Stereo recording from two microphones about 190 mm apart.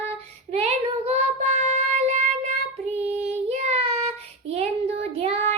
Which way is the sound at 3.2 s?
35° right (ahead or behind).